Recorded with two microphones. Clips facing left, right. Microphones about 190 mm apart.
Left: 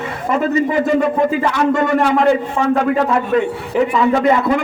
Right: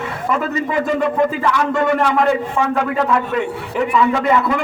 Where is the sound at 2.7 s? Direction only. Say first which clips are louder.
Left 5 dB; 35° left (ahead or behind).